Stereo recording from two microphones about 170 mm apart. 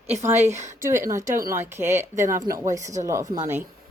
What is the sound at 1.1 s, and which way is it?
Speech, 15° right (ahead or behind).